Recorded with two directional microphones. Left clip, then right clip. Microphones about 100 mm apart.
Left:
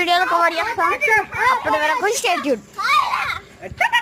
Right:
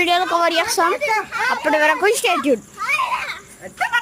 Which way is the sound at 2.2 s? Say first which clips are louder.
Right 2 dB; 50° right (ahead or behind).